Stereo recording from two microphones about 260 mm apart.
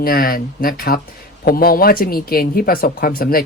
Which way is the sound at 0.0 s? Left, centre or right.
Left.